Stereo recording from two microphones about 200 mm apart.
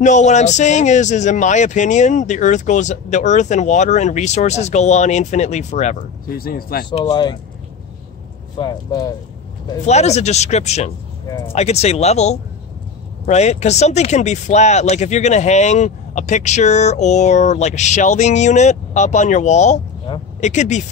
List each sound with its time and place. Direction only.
0.0 s speech: 35° left (ahead or behind)
6.9 s speech: 20° left (ahead or behind)
8.5 s speech: 20° left (ahead or behind)
9.8 s speech: 35° left (ahead or behind)
11.2 s speech: 15° left (ahead or behind)
11.5 s speech: 30° left (ahead or behind)